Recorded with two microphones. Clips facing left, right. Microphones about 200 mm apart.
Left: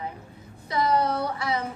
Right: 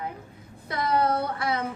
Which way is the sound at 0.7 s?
55° right (ahead or behind).